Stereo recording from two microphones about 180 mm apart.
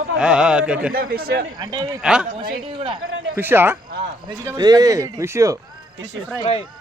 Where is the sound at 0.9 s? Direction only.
55° right (ahead or behind).